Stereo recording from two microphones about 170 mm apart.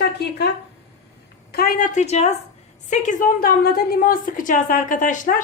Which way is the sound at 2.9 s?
50° left (ahead or behind).